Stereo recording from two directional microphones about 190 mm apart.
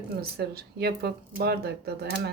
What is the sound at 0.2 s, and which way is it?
Speech, 55° right (ahead or behind).